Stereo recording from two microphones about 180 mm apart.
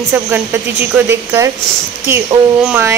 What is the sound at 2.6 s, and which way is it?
Speech, 10° right (ahead or behind).